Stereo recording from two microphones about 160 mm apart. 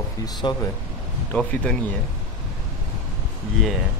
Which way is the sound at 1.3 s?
10° left (ahead or behind).